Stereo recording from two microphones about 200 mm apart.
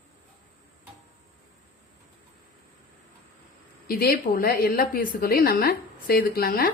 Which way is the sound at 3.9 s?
50° left (ahead or behind).